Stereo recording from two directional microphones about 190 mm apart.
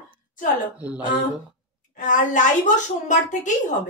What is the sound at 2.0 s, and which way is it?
Speech, 40° left (ahead or behind).